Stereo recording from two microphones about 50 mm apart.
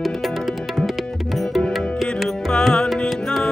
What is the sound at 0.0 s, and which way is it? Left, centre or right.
Music, centre.